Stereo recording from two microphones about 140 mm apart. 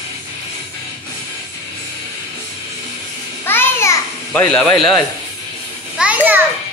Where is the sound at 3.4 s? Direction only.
15° left (ahead or behind).